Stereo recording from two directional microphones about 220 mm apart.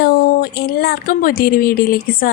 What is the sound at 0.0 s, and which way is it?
Speech, 45° left (ahead or behind).